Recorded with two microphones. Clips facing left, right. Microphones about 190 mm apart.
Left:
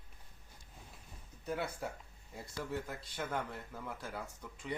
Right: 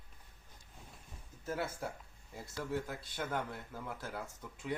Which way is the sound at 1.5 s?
Centre (ahead or behind).